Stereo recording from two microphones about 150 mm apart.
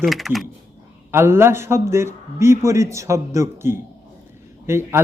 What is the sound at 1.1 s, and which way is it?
Speech, 15° right (ahead or behind).